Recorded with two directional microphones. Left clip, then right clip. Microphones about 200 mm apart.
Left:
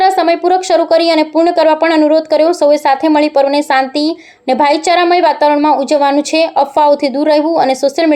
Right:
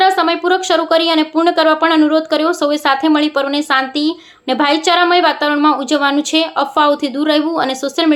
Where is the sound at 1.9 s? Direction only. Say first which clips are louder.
Left 3 dB; 45° right (ahead or behind).